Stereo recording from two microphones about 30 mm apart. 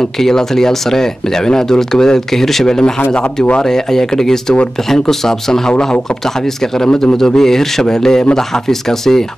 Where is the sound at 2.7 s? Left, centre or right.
Left.